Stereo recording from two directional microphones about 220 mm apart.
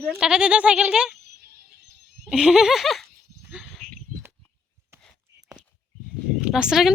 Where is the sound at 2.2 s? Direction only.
5° right (ahead or behind).